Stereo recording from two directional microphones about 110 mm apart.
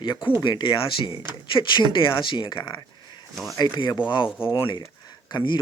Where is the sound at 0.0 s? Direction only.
45° left (ahead or behind).